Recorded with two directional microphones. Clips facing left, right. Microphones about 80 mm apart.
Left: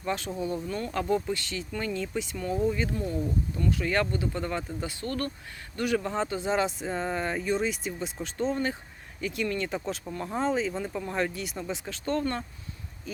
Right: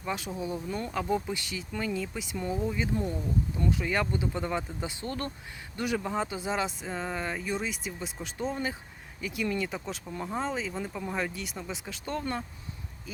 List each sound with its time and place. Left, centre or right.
0.0 s speech: centre